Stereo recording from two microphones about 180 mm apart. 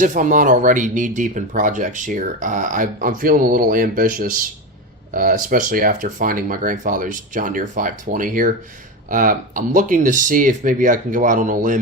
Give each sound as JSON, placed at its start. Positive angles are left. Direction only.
{"t": 0.0, "sound": "speech", "side_deg": -45}